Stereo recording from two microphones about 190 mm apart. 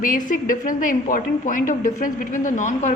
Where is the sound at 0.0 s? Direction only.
45° left (ahead or behind).